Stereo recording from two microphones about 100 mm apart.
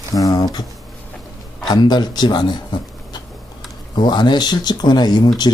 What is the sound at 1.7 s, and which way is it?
Speech, 45° left (ahead or behind).